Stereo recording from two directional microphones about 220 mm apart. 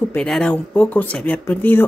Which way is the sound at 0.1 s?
5° left (ahead or behind).